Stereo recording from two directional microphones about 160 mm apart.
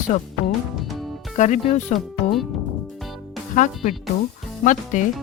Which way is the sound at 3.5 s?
50° left (ahead or behind).